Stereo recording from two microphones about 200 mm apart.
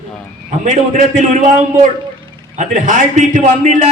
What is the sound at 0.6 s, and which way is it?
Speech, 35° right (ahead or behind).